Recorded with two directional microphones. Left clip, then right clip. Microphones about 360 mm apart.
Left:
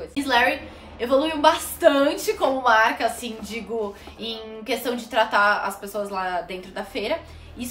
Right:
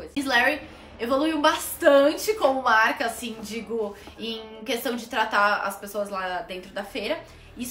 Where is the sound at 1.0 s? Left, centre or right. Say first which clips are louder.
Left 3 dB; centre.